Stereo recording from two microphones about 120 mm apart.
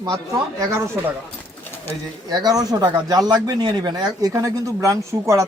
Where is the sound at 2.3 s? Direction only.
35° right (ahead or behind).